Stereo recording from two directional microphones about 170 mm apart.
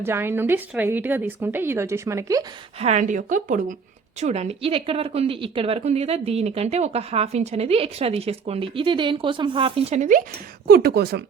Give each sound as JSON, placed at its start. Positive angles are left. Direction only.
{"t": 0.0, "sound": "a woman's voice", "side_deg": -15}
{"t": 2.7, "sound": "a woman's voice", "side_deg": -40}
{"t": 10.7, "sound": "speech", "side_deg": -70}